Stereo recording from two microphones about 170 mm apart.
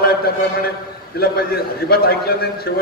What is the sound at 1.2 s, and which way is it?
A man's voice, 65° left (ahead or behind).